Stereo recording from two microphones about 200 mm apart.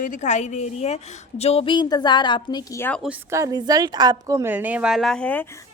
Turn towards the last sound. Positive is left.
turn(degrees=5)  # may be behind; listen again after turning